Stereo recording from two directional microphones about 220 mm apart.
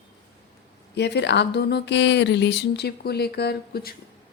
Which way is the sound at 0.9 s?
50° left (ahead or behind).